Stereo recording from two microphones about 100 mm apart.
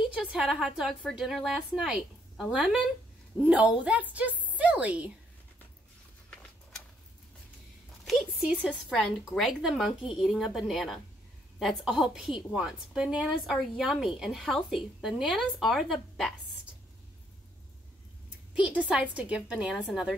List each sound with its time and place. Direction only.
0.0 s a woman's voice: 10° right (ahead or behind)
8.0 s a sound: 5° right (ahead or behind)
8.5 s a woman's voice: 15° right (ahead or behind)
8.8 s speech: centre (ahead or behind)
18.5 s a woman's voice: 10° right (ahead or behind)